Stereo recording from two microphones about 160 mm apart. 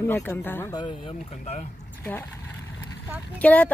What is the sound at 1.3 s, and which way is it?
Speech, 45° left (ahead or behind).